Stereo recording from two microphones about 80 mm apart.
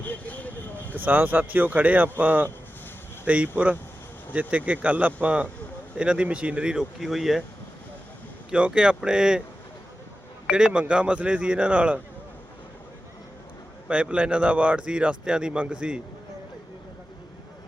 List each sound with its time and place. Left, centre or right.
0.0 s a sound: left
0.9 s speech: right; by 7.4 s centre
8.4 s speech: centre
10.5 s speech: centre
13.8 s speech: centre